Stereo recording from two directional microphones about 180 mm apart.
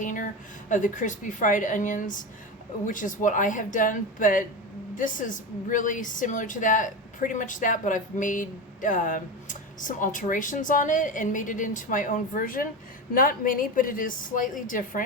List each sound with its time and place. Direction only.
0.0 s a woman's voice: 45° left (ahead or behind)